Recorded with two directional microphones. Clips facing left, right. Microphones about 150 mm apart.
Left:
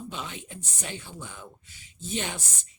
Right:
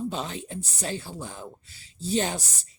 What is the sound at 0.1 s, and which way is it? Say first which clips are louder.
Speech: right 6 dB; 35° right (ahead or behind).